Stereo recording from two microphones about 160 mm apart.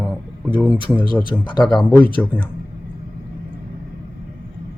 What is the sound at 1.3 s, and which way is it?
Speech, 15° left (ahead or behind).